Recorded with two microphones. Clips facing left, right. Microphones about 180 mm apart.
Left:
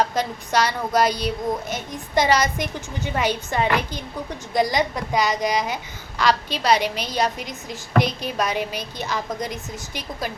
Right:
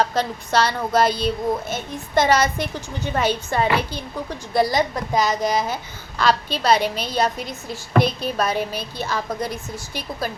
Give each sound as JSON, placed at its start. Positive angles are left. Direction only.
{"t": 0.1, "sound": "a woman's voice", "side_deg": 15}